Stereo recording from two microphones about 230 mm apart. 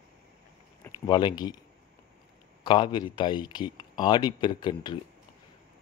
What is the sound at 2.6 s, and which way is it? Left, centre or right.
Speech, left.